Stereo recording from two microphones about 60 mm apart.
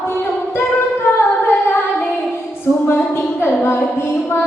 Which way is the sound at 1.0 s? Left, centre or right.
Left.